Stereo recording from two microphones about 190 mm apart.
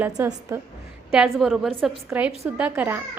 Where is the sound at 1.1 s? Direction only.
5° right (ahead or behind).